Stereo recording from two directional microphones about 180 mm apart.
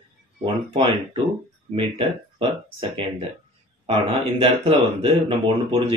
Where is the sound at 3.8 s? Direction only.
30° right (ahead or behind).